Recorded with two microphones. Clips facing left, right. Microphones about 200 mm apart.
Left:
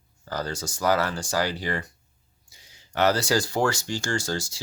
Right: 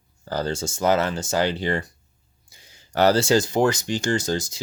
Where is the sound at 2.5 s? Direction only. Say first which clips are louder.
Right 3 dB; 55° right (ahead or behind).